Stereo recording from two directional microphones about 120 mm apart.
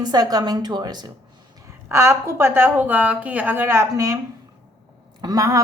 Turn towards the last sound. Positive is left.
turn(degrees=-25)  # may be behind; listen again after turning